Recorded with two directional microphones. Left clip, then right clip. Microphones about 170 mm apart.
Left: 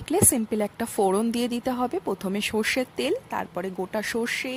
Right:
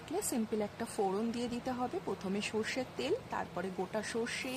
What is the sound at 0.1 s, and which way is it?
A woman's voice, 50° left (ahead or behind).